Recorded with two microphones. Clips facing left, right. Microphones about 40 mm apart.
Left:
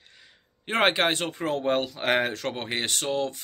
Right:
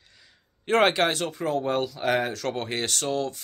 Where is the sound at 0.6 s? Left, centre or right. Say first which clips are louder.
Right 2 dB; left.